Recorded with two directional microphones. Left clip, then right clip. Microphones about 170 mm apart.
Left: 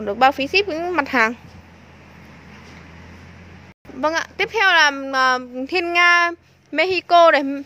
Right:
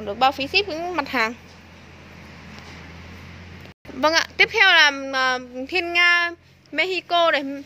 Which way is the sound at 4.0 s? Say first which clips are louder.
Right 3 dB; 10° left (ahead or behind).